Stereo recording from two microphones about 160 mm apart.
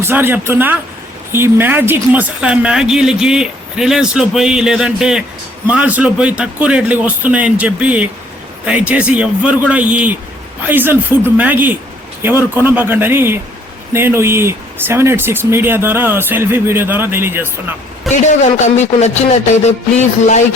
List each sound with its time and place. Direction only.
0.0 s speech: 15° right (ahead or behind)
18.1 s a man's voice: centre (ahead or behind)
18.6 s music: 45° left (ahead or behind)